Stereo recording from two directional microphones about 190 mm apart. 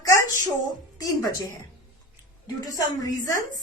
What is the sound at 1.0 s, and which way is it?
Speech, 15° left (ahead or behind).